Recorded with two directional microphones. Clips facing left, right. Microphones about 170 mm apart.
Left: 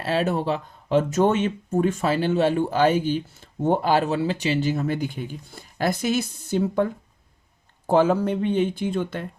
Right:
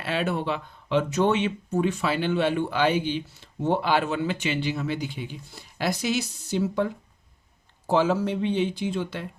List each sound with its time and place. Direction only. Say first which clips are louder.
0.0 s speech: left 4 dB; 40° left (ahead or behind)
7.9 s speech: left 3 dB; 55° left (ahead or behind)